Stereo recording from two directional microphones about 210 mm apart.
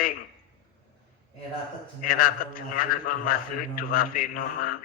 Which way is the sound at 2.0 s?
45° left (ahead or behind).